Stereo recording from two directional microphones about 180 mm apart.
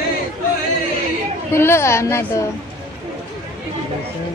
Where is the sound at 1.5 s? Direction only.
15° left (ahead or behind).